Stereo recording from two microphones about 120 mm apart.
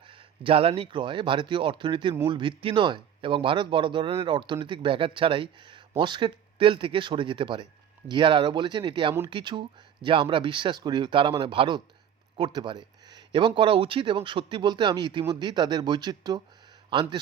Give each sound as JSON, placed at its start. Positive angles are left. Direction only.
{"t": 0.1, "sound": "speech", "side_deg": -50}